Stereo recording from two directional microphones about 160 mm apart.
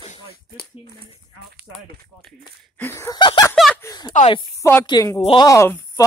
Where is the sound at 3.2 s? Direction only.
30° left (ahead or behind).